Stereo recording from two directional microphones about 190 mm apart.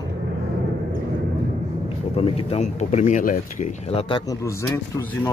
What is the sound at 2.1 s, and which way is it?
Speech, 30° left (ahead or behind).